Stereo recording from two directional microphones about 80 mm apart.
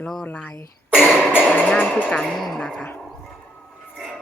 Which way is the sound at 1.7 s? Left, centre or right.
Centre.